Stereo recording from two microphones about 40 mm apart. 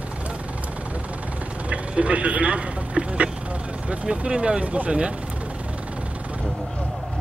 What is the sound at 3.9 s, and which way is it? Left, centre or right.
Speech, right.